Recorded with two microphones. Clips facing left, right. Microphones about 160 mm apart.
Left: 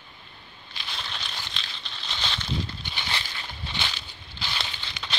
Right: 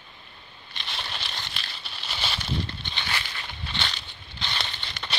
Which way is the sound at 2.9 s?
20° left (ahead or behind).